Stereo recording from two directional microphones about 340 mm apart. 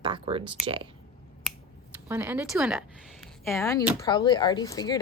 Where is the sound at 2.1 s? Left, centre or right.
Centre.